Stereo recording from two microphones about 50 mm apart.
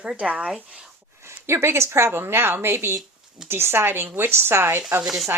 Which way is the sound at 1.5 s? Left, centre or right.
Right.